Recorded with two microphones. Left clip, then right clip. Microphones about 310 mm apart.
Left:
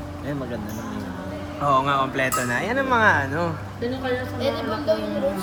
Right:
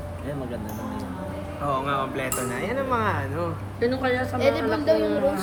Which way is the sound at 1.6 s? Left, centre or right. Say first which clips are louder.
Left 6 dB; left.